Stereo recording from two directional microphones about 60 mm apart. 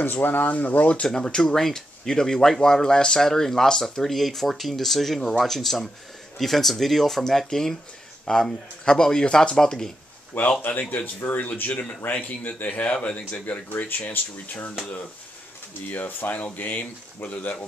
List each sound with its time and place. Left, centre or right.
0.0 s speech: left
1.0 s speech: centre
10.6 s speech: left
15.9 s speech: left